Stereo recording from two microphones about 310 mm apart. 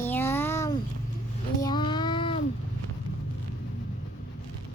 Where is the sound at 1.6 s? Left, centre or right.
Centre.